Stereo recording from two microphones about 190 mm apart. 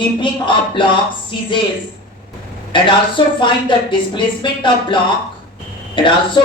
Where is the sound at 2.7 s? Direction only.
25° left (ahead or behind).